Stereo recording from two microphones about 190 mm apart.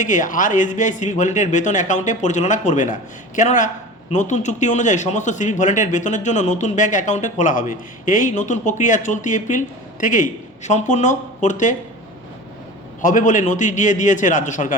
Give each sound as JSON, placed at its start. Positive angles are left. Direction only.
{"t": 0.0, "sound": "speech", "side_deg": 40}
{"t": 13.0, "sound": "speech", "side_deg": 45}